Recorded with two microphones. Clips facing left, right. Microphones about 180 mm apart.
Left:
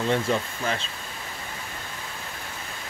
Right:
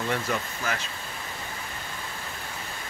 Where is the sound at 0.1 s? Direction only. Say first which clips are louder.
Left 4 dB; 25° left (ahead or behind).